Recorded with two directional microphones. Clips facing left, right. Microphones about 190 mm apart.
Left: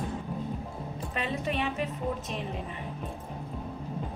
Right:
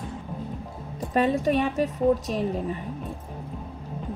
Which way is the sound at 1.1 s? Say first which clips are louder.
Right 10 dB; 45° right (ahead or behind).